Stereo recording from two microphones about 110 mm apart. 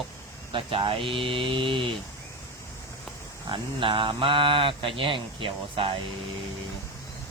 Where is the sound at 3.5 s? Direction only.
50° right (ahead or behind).